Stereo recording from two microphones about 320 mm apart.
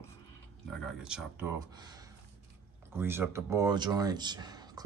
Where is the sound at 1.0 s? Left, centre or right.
Centre.